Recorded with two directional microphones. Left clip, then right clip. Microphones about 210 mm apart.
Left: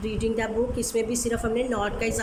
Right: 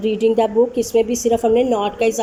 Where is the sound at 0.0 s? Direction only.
10° right (ahead or behind).